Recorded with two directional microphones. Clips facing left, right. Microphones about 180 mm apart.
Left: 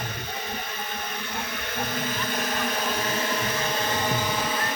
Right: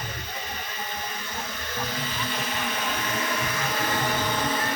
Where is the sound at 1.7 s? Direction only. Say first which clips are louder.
Left 3 dB; 55° left (ahead or behind).